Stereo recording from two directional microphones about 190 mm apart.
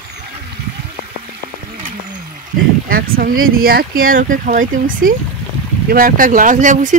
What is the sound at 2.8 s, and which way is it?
Speech, 50° right (ahead or behind).